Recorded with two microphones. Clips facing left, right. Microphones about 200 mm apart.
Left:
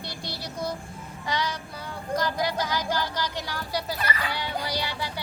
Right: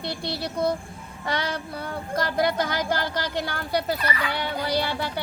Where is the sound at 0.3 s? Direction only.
60° right (ahead or behind).